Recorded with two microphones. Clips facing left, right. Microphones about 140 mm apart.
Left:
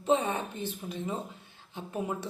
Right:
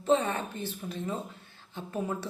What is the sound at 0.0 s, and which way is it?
Speech, 15° left (ahead or behind).